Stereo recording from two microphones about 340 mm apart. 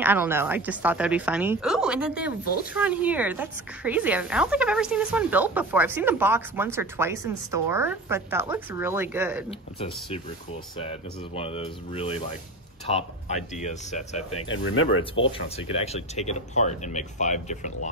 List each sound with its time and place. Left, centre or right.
0.0 s a woman's voice: centre
2.4 s speech: left
2.7 s a woman's voice: centre
9.5 s speech: centre
14.3 s speech: left
15.3 s speech: centre